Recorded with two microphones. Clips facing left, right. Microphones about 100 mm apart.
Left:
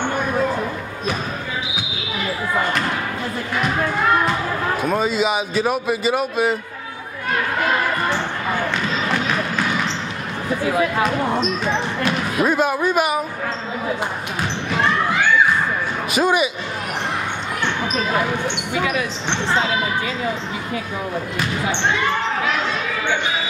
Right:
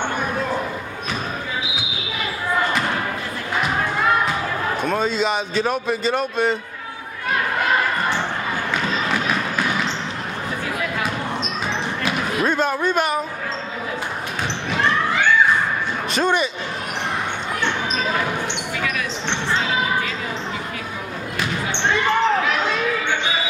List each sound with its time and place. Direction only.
4.8 s a man's voice: 5° left (ahead or behind)
12.4 s speech: 5° left (ahead or behind)
16.1 s speech: 5° left (ahead or behind)
18.8 s speech: 20° left (ahead or behind)